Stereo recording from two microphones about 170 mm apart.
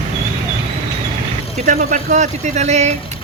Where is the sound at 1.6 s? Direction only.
45° right (ahead or behind).